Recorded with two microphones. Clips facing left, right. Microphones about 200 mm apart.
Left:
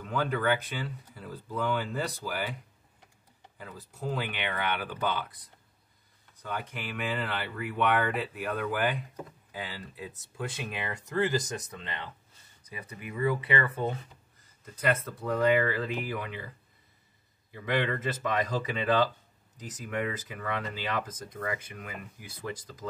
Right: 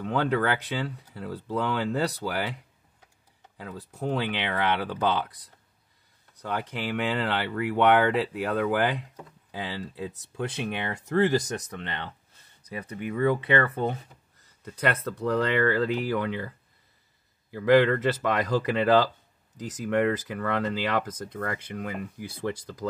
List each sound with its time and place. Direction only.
0.0 s speech: 75° right (ahead or behind)
3.5 s speech: 65° right (ahead or behind)
6.4 s speech: 75° right (ahead or behind)
17.5 s speech: 75° right (ahead or behind)